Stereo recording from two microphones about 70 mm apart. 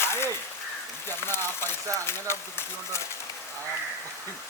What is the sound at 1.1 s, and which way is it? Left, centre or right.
Speech, left.